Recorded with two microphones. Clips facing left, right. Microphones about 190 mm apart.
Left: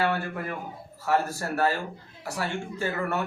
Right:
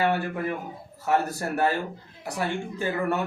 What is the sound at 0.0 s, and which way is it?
A man's voice, 15° right (ahead or behind).